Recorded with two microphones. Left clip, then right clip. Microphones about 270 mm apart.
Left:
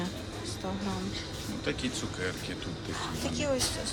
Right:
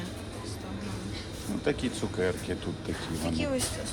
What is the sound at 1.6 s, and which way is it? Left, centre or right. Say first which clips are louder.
Speech: right 3 dB; centre.